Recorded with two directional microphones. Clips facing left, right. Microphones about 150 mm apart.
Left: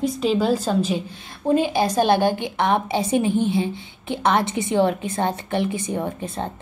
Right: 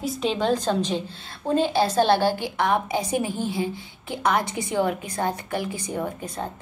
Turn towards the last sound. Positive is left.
turn(degrees=25)  # may be behind; listen again after turning